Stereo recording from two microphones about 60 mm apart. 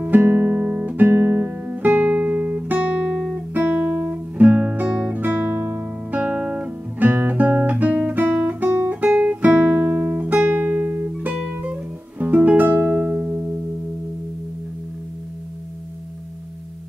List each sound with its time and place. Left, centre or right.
0.0 s guitar: right
1.7 s music: right
4.8 s guitar: centre
5.6 s music: right
6.1 s guitar: right
7.1 s guitar: right
11.6 s music: right